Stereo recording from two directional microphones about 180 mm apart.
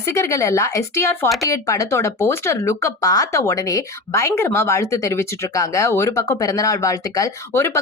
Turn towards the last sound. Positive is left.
turn(degrees=15)  # may be behind; listen again after turning